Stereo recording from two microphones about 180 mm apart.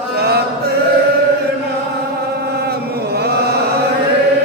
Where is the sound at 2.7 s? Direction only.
60° right (ahead or behind).